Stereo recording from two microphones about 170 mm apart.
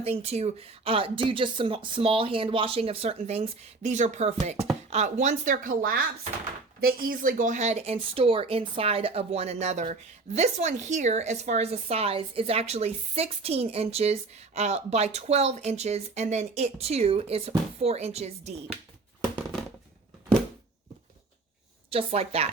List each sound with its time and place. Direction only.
0.0 s speech: 35° right (ahead or behind)
21.8 s speech: 35° right (ahead or behind)